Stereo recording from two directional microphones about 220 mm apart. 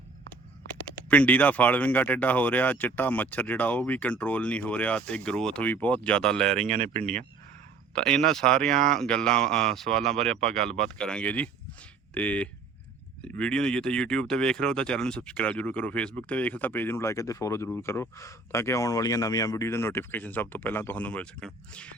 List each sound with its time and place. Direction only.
1.1 s speech: 5° left (ahead or behind)
6.7 s speech: 35° right (ahead or behind)
7.9 s speech: 5° left (ahead or behind)